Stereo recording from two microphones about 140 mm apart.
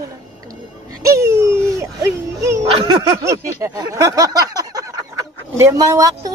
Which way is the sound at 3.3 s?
25° right (ahead or behind).